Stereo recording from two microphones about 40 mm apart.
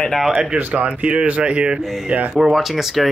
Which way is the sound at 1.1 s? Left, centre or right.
Right.